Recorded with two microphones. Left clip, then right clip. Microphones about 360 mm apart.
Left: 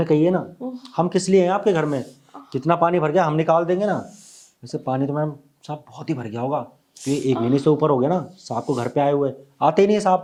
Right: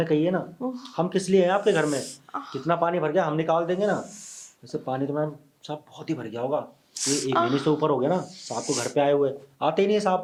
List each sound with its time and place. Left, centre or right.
0.0 s speech: left
2.5 s speech: left
7.0 s speech: right
7.4 s speech: left